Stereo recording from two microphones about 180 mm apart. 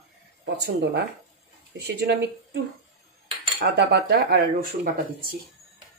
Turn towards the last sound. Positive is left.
turn(degrees=-55)  # may be behind; listen again after turning